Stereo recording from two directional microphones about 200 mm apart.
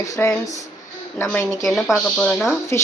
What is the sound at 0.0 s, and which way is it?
Speech, 15° left (ahead or behind).